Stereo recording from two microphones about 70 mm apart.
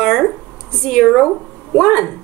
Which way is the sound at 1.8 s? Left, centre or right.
Left.